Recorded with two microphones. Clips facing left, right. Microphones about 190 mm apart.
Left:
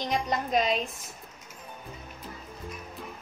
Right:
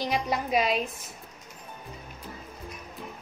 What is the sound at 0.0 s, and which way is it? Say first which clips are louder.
Speech: right 1 dB; 5° right (ahead or behind).